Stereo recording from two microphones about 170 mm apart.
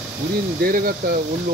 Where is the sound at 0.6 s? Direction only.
60° right (ahead or behind).